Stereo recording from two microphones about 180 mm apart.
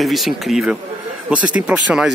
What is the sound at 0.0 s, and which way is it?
Speech, centre (ahead or behind).